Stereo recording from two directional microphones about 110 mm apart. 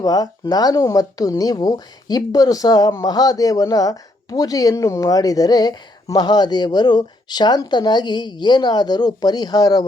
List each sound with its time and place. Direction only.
0.0 s speech: 35° left (ahead or behind)